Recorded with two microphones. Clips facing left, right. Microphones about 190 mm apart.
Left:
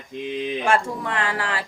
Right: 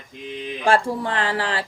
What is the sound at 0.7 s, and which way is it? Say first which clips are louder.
Speech: right 5 dB; 30° right (ahead or behind).